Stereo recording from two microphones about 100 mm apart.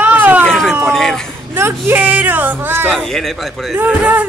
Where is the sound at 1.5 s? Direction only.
20° right (ahead or behind).